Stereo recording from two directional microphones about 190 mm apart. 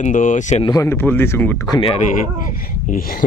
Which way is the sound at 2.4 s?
45° left (ahead or behind).